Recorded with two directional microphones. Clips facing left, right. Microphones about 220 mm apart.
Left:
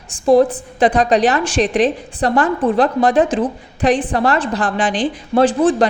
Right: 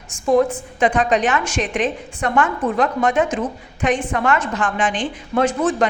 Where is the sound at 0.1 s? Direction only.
35° left (ahead or behind).